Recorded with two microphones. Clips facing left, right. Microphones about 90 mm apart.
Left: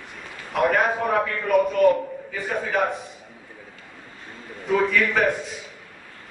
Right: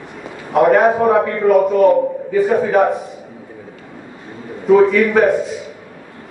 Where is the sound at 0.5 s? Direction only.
20° right (ahead or behind).